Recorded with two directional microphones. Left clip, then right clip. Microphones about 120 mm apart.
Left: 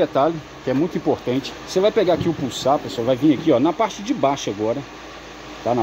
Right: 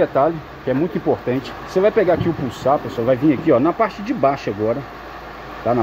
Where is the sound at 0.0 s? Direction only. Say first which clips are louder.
Right 2 dB; 30° left (ahead or behind).